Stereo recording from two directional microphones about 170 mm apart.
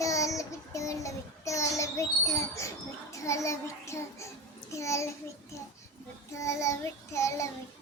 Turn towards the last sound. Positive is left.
turn(degrees=15)  # may be behind; listen again after turning